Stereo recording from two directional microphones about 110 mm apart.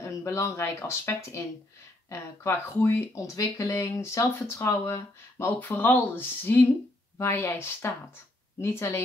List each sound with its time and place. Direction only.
0.0 s speech: 25° left (ahead or behind)